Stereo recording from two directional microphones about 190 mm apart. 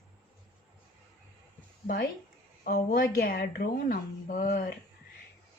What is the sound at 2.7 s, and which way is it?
Speech, 50° left (ahead or behind).